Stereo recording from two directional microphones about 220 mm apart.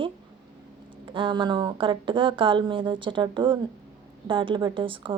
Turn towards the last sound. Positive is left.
turn(degrees=-25)  # may be behind; listen again after turning